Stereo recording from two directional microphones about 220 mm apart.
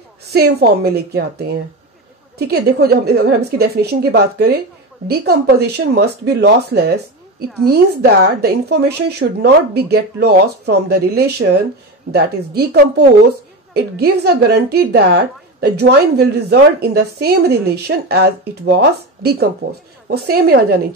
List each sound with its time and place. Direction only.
0.2 s a woman's voice: 45° right (ahead or behind)